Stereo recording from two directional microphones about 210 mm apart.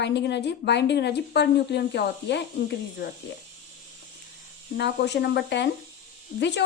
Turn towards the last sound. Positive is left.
turn(degrees=55)  # may be behind; listen again after turning